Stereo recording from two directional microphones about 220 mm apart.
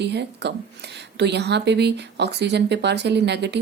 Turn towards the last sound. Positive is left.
turn(degrees=-50)  # may be behind; listen again after turning